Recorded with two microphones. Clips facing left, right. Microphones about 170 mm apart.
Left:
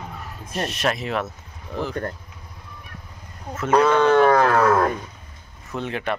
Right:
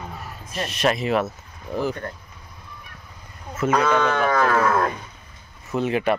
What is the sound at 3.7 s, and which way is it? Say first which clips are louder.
Speech: left 5 dB; 35° left (ahead or behind).